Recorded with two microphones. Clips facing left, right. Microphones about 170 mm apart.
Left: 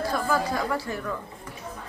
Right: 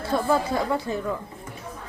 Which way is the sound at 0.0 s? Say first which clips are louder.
Right 3 dB; 25° right (ahead or behind).